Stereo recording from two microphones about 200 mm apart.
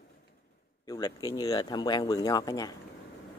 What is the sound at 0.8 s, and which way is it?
Speech, 20° left (ahead or behind).